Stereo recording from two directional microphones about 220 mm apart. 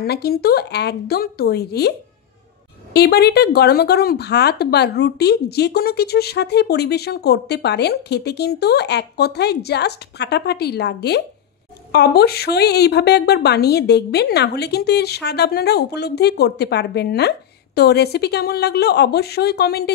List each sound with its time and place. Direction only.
0.0 s speech: 45° left (ahead or behind)